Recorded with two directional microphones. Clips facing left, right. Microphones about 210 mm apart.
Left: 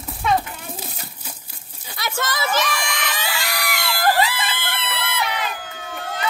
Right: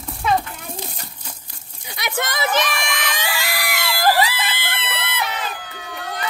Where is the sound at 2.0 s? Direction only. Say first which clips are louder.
Right 1 dB; 20° right (ahead or behind).